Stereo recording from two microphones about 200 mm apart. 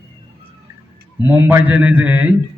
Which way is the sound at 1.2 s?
10° right (ahead or behind).